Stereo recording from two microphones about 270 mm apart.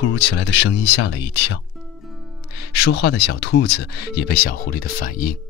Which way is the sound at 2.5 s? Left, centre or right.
Left.